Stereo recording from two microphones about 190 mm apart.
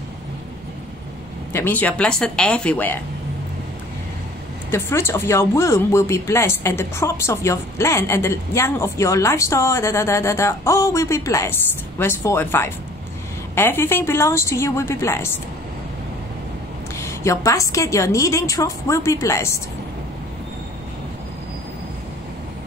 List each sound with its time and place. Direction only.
1.5 s a woman's voice: 10° left (ahead or behind)
4.6 s speech: 15° left (ahead or behind)
17.0 s speech: 15° left (ahead or behind)